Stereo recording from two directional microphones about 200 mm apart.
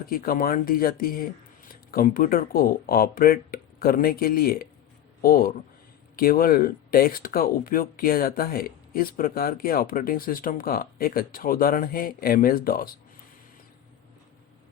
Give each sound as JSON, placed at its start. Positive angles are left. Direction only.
{"t": 0.1, "sound": "speech", "side_deg": 45}